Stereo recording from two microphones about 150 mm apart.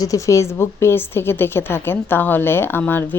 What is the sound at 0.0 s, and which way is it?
A woman's voice, 20° left (ahead or behind).